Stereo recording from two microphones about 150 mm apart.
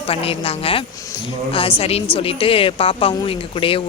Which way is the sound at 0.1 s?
40° left (ahead or behind).